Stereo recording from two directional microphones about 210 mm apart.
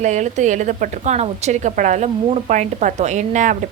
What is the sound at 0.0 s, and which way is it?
A woman's voice, 35° right (ahead or behind).